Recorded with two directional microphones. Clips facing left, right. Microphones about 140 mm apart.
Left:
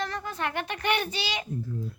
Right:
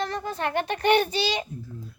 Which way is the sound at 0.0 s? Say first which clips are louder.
Right 3 dB; 30° right (ahead or behind).